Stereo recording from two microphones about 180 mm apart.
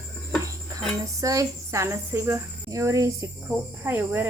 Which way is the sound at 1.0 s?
20° right (ahead or behind).